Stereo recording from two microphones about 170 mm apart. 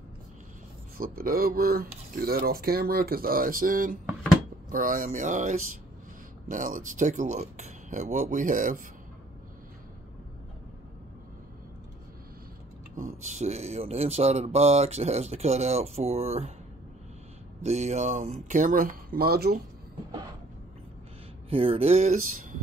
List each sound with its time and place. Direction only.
0.9 s speech: 60° right (ahead or behind)
12.9 s speech: 50° right (ahead or behind)
17.6 s speech: 40° right (ahead or behind); by 19.6 s 65° right (ahead or behind)
21.5 s speech: 35° right (ahead or behind)